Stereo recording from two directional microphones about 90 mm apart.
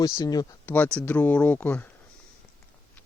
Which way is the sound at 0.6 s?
20° left (ahead or behind).